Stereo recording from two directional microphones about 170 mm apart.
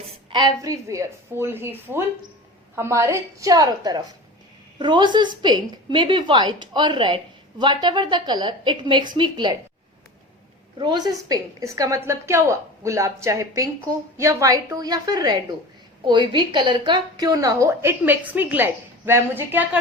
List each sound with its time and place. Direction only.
0.0 s a woman's voice: 30° right (ahead or behind)
10.8 s a woman's voice: 25° right (ahead or behind)